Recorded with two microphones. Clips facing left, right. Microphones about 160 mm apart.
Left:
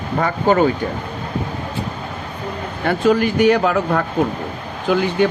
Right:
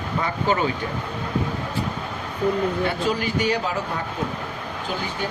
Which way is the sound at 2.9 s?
55° left (ahead or behind).